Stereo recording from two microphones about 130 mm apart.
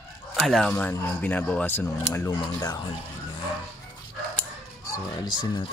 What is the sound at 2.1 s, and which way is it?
Speech, 25° left (ahead or behind).